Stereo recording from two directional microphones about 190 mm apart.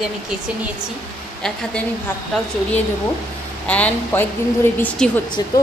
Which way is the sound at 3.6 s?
5° left (ahead or behind).